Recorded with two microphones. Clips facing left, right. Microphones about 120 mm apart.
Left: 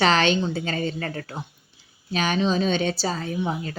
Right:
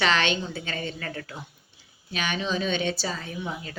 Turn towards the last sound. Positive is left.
turn(degrees=40)  # may be behind; listen again after turning